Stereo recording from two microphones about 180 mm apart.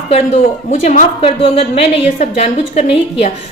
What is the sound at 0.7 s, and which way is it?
A woman's voice, 40° left (ahead or behind).